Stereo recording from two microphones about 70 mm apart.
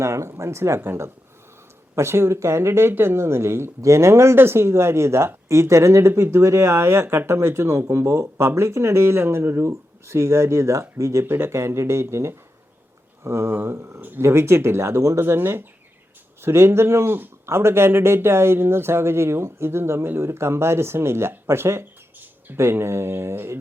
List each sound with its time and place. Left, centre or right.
0.0 s speech: right